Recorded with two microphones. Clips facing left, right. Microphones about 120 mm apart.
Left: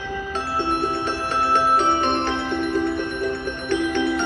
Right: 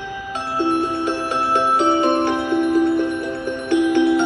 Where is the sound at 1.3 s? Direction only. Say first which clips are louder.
Even; 25° right (ahead or behind).